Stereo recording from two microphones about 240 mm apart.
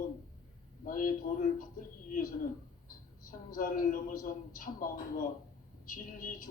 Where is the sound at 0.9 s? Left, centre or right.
Left.